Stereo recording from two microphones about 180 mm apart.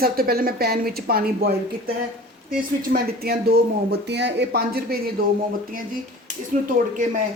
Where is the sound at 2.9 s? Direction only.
60° right (ahead or behind).